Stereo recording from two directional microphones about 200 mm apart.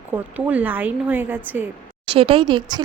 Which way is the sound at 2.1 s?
25° right (ahead or behind).